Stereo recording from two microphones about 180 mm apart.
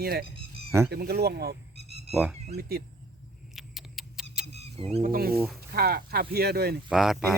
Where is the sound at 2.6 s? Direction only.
60° right (ahead or behind).